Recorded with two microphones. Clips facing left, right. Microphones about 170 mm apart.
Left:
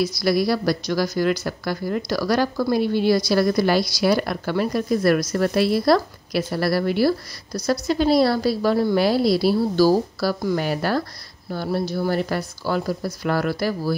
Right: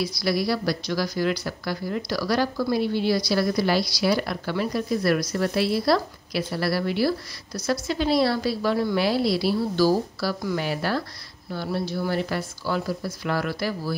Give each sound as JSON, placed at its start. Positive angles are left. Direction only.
{"t": 0.0, "sound": "a woman's voice", "side_deg": 45}